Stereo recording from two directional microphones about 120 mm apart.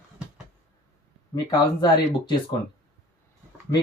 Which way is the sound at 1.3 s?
35° left (ahead or behind).